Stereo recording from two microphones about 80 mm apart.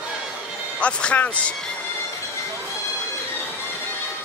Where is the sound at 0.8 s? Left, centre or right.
Centre.